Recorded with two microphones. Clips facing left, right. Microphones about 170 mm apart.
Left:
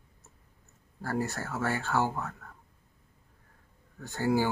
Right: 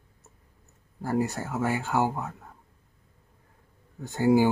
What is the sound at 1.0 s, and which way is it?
Speech, 15° right (ahead or behind).